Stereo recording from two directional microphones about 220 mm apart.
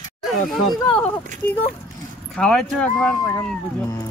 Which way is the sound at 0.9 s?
5° left (ahead or behind).